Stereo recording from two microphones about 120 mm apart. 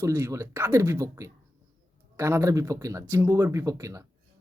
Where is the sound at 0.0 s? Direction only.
20° right (ahead or behind).